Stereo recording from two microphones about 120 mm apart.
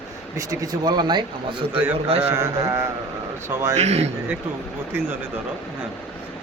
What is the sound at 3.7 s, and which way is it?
Speech, 60° right (ahead or behind).